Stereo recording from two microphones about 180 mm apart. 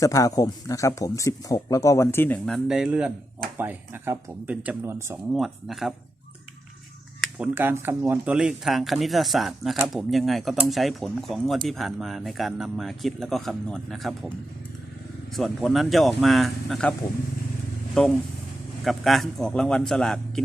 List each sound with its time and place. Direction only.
0.0 s speech: 20° left (ahead or behind)
2.6 s speech: 5° right (ahead or behind)
5.3 s speech: centre (ahead or behind)
7.2 s speech: 10° right (ahead or behind)
15.4 s speech: centre (ahead or behind)
18.0 s speech: 5° left (ahead or behind)